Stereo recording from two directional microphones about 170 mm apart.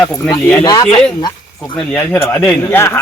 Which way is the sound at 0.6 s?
25° left (ahead or behind).